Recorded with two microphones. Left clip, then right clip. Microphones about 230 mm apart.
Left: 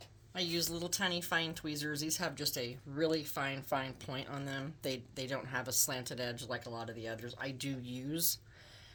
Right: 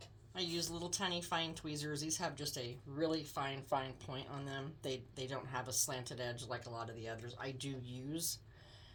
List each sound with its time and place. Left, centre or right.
0.3 s speech: left